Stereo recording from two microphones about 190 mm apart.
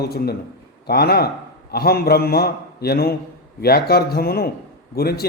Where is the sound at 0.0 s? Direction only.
55° left (ahead or behind).